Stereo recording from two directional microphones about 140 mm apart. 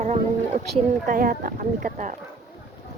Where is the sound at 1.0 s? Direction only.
70° right (ahead or behind).